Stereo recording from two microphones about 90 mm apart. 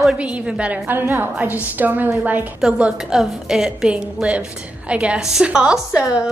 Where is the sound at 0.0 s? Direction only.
10° right (ahead or behind).